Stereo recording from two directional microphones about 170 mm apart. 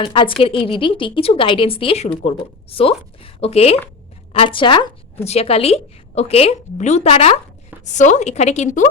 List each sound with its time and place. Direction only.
0.0 s a woman's voice: 30° left (ahead or behind)